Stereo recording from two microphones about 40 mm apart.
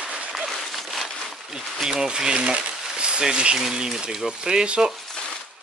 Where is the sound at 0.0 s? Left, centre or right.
Right.